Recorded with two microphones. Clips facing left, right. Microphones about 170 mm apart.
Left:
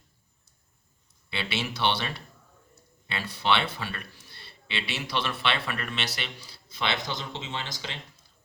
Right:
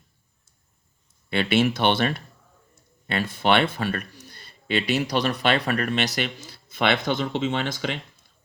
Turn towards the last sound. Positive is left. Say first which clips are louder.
# right 10 dB
turn(degrees=-60)  # may be behind; listen again after turning